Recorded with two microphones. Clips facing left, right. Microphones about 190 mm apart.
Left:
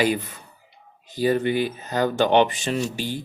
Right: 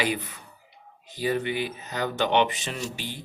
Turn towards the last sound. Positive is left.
turn(degrees=40)  # may be behind; listen again after turning